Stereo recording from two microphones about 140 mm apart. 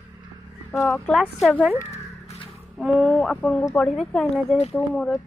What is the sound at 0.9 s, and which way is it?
Speech, centre (ahead or behind).